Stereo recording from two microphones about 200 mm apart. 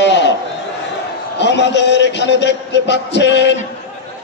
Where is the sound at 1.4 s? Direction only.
60° left (ahead or behind).